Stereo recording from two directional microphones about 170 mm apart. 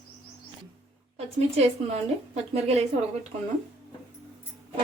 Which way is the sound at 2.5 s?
35° right (ahead or behind).